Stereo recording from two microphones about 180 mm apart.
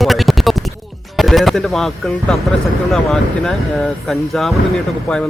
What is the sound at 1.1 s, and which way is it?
A man's voice, centre (ahead or behind).